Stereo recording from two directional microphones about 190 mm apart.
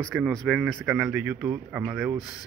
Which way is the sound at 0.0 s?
5° left (ahead or behind).